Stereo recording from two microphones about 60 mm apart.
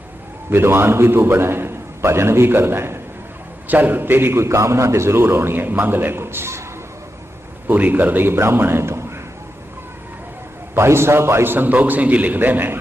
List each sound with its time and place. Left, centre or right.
0.5 s a man's voice: right
3.7 s a man's voice: right
7.7 s a man's voice: right
10.8 s a man's voice: right